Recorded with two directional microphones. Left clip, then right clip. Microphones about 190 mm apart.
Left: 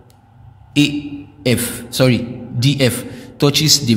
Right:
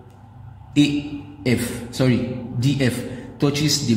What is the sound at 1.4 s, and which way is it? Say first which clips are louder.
A man's voice: left 5 dB; 50° left (ahead or behind).